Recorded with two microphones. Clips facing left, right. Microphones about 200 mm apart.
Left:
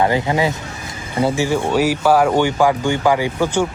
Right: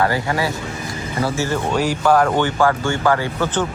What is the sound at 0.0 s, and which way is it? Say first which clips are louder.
Speech: left 3 dB; 20° left (ahead or behind).